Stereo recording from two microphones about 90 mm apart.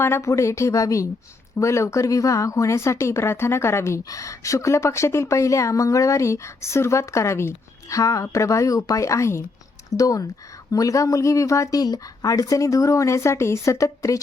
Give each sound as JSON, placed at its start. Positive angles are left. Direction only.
{"t": 0.0, "sound": "a woman's voice", "side_deg": 30}